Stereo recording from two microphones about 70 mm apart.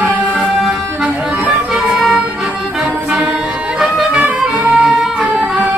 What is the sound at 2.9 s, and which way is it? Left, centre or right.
Music, right.